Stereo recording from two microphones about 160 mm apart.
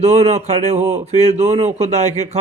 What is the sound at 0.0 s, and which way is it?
Speech, 40° right (ahead or behind).